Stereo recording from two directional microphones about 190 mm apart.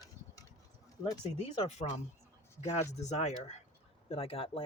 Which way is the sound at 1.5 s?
35° left (ahead or behind).